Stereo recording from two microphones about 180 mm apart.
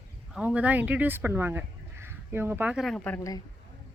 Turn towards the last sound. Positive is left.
turn(degrees=15)  # may be behind; listen again after turning